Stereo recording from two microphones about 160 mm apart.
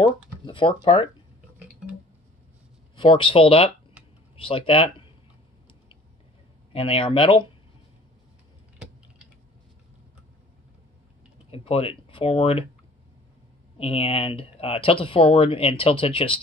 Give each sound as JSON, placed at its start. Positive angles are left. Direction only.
{"t": 0.0, "sound": "speech", "side_deg": 35}
{"t": 3.0, "sound": "speech", "side_deg": 30}
{"t": 6.7, "sound": "speech", "side_deg": 35}
{"t": 11.5, "sound": "speech", "side_deg": 35}
{"t": 13.7, "sound": "speech", "side_deg": 35}